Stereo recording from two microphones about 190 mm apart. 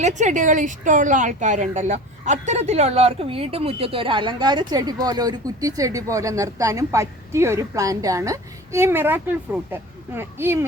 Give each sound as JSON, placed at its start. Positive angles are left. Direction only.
{"t": 0.0, "sound": "a woman's voice", "side_deg": -40}